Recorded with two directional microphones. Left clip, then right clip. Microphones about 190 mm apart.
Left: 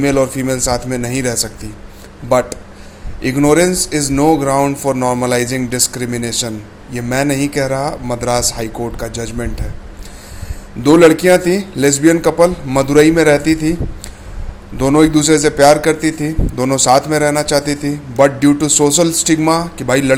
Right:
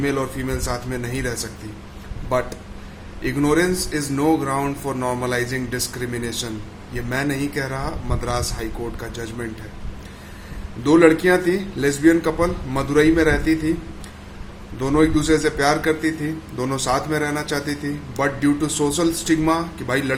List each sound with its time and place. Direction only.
0.0 s a man's voice: 40° left (ahead or behind)
3.2 s a man's voice: 40° left (ahead or behind)
10.8 s a man's voice: 40° left (ahead or behind)
14.8 s a man's voice: 40° left (ahead or behind)